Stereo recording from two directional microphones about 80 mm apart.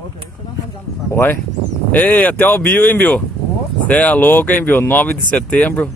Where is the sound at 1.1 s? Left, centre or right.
Left.